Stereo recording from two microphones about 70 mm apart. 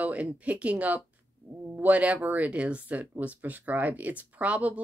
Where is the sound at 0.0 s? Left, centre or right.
Centre.